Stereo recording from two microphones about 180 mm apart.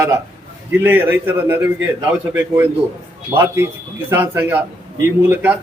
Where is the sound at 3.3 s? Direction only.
15° right (ahead or behind).